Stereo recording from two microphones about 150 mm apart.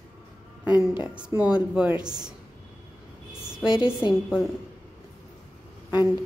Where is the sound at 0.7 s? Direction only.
20° left (ahead or behind).